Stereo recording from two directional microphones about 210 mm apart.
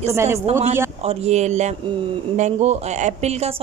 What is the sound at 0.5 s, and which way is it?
A woman's voice, 35° right (ahead or behind).